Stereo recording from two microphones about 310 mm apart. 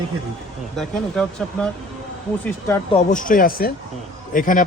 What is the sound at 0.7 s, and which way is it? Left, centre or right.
Speech, centre.